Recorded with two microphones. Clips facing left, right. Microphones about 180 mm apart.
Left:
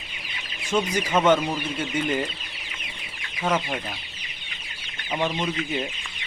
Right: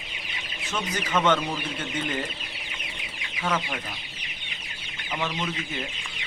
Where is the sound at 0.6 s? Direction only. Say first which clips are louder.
Left 7 dB; 10° left (ahead or behind).